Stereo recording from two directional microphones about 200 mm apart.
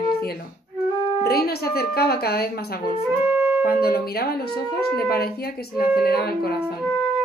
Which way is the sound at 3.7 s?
50° left (ahead or behind).